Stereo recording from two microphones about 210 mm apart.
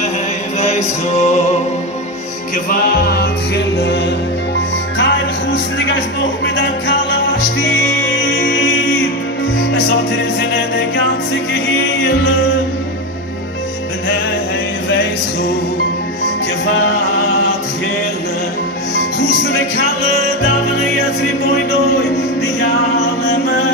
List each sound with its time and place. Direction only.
0.6 s music: 30° left (ahead or behind)
2.7 s music: 45° left (ahead or behind)
4.9 s speech: 60° left (ahead or behind)
7.6 s music: 60° left (ahead or behind)
11.5 s music: 55° left (ahead or behind)